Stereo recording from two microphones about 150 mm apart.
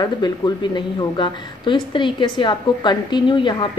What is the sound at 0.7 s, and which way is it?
A woman's voice, 30° left (ahead or behind).